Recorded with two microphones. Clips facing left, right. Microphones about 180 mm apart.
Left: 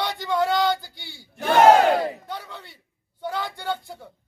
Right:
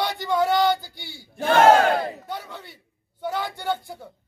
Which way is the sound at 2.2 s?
10° right (ahead or behind).